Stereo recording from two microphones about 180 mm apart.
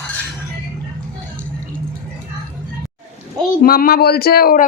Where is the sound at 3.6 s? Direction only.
55° left (ahead or behind).